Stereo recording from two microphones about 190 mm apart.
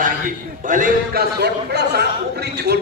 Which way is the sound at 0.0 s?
45° right (ahead or behind).